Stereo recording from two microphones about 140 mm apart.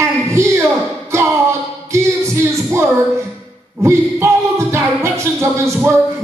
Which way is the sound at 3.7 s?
20° right (ahead or behind).